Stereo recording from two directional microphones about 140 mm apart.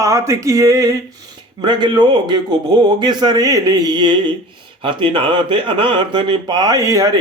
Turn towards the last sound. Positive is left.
turn(degrees=-25)  # may be behind; listen again after turning